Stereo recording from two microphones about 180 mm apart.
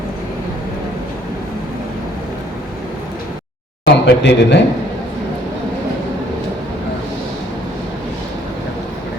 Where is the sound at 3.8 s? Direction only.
75° left (ahead or behind).